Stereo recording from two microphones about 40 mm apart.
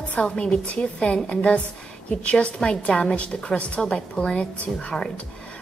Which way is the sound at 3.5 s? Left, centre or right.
Left.